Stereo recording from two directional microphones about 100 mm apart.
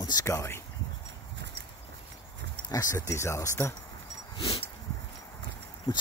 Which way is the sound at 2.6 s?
30° left (ahead or behind).